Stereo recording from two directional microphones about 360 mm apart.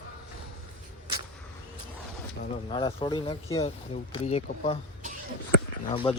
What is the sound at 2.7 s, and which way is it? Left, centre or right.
Speech, centre.